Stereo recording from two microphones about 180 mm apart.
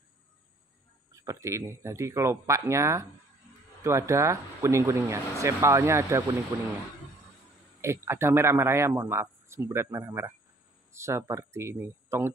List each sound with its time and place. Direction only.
1.2 s a man's voice: 15° right (ahead or behind)
7.8 s a man's voice: 15° right (ahead or behind)